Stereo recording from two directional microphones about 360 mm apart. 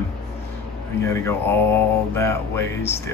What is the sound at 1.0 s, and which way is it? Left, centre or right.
Speech, centre.